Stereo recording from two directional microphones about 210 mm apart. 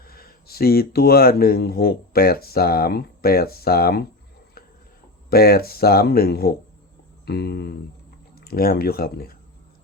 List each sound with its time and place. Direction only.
0.0 s speech: 45° left (ahead or behind)
5.3 s speech: 45° left (ahead or behind)